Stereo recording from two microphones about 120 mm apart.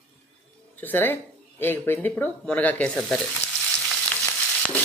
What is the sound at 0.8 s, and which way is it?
Speech, 15° left (ahead or behind).